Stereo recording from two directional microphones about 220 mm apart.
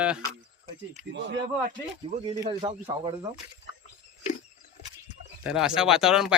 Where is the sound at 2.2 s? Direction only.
20° right (ahead or behind).